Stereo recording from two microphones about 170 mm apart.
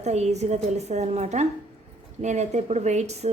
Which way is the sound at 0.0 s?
40° right (ahead or behind).